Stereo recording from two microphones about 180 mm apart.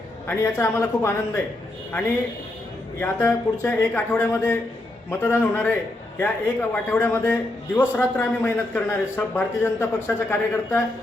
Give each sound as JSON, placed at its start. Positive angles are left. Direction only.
{"t": 0.3, "sound": "a man's voice", "side_deg": 15}
{"t": 3.0, "sound": "a man's voice", "side_deg": 10}